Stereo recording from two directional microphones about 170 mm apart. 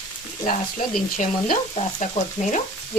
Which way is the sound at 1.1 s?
50° left (ahead or behind).